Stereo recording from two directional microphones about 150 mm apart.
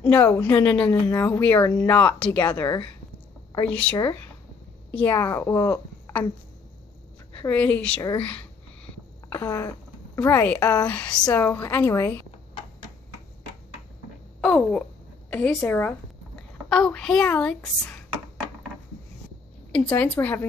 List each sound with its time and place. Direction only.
0.0 s a woman's voice: 10° left (ahead or behind)
7.3 s a woman's voice: 10° left (ahead or behind)
8.2 s a sound: 10° left (ahead or behind)
10.1 s a woman's voice: 15° left (ahead or behind)
14.4 s a woman's voice: 5° left (ahead or behind)
19.9 s a woman's voice: 10° left (ahead or behind)